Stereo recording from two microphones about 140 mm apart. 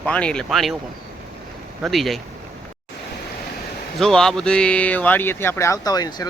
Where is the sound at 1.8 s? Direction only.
Centre (ahead or behind).